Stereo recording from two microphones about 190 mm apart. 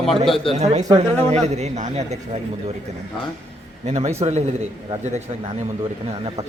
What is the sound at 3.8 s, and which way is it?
Speech, 35° right (ahead or behind).